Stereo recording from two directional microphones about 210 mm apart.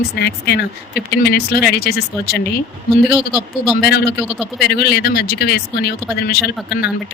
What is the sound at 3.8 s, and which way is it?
Speech, 50° left (ahead or behind).